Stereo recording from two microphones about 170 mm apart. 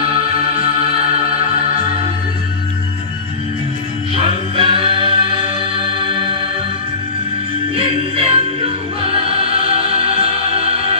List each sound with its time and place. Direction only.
4.1 s music: 35° right (ahead or behind)
7.8 s music: 35° right (ahead or behind)
9.8 s music: 35° right (ahead or behind)